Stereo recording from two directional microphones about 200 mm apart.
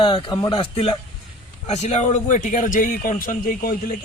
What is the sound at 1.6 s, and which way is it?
A man's voice, 35° left (ahead or behind).